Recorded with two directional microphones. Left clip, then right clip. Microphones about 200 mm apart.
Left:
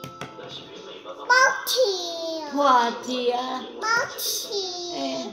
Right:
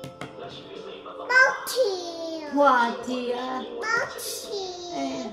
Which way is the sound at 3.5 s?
5° right (ahead or behind).